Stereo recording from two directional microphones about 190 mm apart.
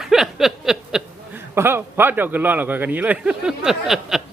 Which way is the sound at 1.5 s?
10° right (ahead or behind).